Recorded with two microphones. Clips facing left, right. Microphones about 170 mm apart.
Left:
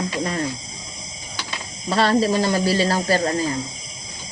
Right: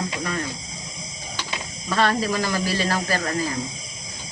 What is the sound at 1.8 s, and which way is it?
Speech, 30° left (ahead or behind).